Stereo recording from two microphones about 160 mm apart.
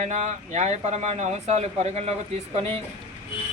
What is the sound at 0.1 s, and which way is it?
Speech, 45° right (ahead or behind).